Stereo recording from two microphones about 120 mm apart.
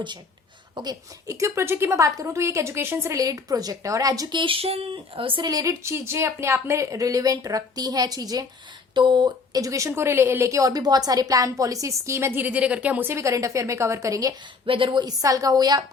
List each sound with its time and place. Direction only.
0.8 s speech: 30° right (ahead or behind); by 5.5 s 45° right (ahead or behind)
5.5 s speech: 30° right (ahead or behind)
14.7 s a woman's voice: 45° right (ahead or behind)